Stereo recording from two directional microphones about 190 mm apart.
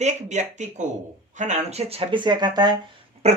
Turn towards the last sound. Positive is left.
turn(degrees=-35)  # may be behind; listen again after turning